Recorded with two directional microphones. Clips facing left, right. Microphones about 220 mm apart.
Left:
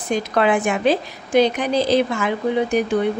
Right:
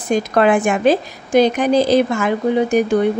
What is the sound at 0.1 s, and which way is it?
A woman's voice, 45° right (ahead or behind).